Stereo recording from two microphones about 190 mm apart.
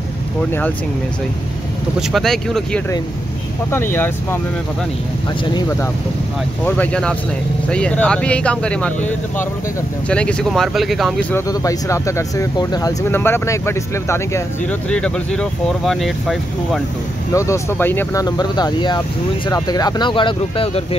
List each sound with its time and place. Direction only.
0.5 s speech: 10° left (ahead or behind)
2.0 s speech: centre (ahead or behind)
5.4 s speech: 20° left (ahead or behind)
6.6 s speech: 5° left (ahead or behind)
11.3 s speech: 15° left (ahead or behind); by 16.8 s centre (ahead or behind)
17.3 s speech: 15° left (ahead or behind)
18.2 s speech: 20° left (ahead or behind)